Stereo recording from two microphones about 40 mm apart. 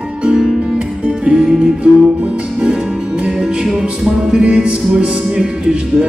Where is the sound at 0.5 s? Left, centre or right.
Right.